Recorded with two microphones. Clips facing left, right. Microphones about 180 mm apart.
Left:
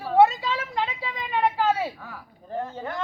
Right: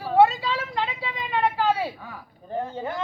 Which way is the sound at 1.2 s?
10° left (ahead or behind).